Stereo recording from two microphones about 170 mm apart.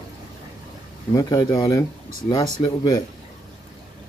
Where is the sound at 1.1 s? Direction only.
20° left (ahead or behind).